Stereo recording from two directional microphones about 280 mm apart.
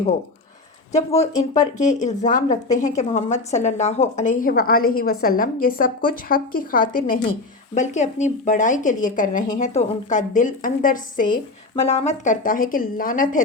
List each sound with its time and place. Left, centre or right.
0.9 s a woman's voice: left